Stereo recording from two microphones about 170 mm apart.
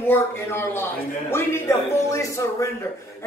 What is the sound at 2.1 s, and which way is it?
Speech, 20° left (ahead or behind).